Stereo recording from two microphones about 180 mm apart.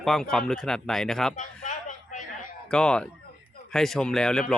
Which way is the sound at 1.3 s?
45° left (ahead or behind).